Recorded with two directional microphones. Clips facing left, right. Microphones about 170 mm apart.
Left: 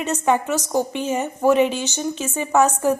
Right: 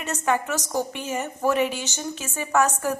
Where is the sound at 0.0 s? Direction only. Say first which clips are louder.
Left 5 dB; 20° left (ahead or behind).